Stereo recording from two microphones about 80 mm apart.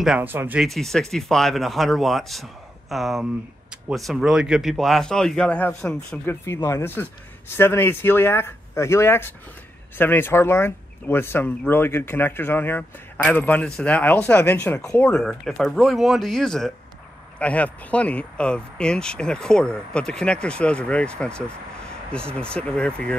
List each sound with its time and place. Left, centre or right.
0.2 s speech: right
0.6 s speech: centre
6.2 s speech: left
15.0 s speech: centre
17.4 s speech: centre